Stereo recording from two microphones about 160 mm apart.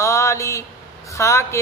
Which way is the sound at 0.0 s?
20° left (ahead or behind).